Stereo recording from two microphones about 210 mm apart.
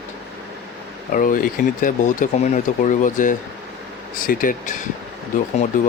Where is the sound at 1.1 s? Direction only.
40° left (ahead or behind).